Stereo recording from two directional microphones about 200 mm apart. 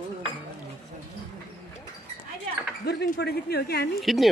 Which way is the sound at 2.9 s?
55° left (ahead or behind).